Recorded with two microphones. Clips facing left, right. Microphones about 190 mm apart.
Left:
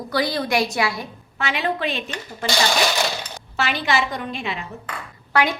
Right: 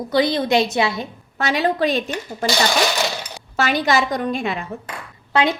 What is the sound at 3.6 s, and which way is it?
A woman's voice, 45° right (ahead or behind).